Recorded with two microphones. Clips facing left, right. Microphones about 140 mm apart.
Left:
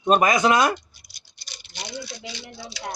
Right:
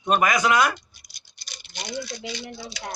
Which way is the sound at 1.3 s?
50° right (ahead or behind).